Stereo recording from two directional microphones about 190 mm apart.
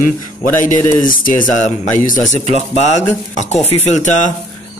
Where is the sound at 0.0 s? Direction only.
45° left (ahead or behind).